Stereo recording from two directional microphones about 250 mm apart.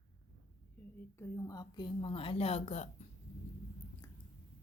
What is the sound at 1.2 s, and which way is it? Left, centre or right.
A woman's voice, centre.